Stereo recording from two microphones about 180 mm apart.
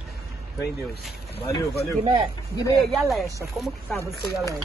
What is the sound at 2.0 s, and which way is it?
Speech, 20° right (ahead or behind).